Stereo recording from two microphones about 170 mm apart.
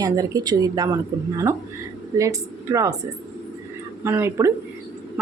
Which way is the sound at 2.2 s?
20° right (ahead or behind).